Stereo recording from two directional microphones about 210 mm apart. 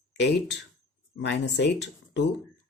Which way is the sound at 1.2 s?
55° left (ahead or behind).